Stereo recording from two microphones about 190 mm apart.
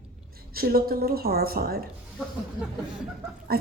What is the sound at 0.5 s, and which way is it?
A woman's voice, 50° right (ahead or behind).